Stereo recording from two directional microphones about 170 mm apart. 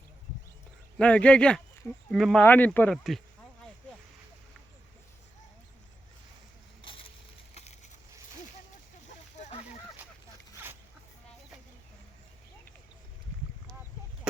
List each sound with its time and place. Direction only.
0.9 s speech: 5° left (ahead or behind)
6.8 s crushing: 30° left (ahead or behind)
9.3 s a sound: 40° left (ahead or behind)